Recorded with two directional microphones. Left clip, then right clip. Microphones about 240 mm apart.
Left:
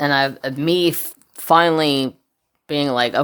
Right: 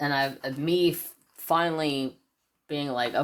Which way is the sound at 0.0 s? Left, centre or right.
Left.